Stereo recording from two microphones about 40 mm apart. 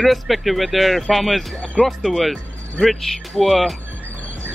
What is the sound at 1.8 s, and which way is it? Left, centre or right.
Speech, centre.